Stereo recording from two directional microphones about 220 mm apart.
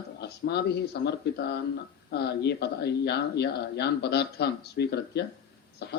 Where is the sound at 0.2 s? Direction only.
50° left (ahead or behind).